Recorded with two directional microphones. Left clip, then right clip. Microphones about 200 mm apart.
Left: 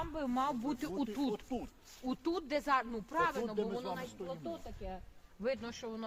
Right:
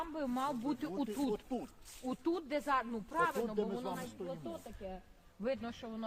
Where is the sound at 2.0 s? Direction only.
55° left (ahead or behind).